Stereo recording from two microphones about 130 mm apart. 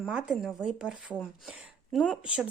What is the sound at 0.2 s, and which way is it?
A woman's voice, 5° right (ahead or behind).